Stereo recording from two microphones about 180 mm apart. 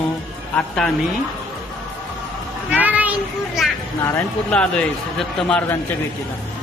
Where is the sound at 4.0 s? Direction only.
15° left (ahead or behind).